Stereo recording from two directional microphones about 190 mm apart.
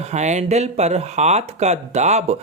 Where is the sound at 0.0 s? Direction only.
35° right (ahead or behind).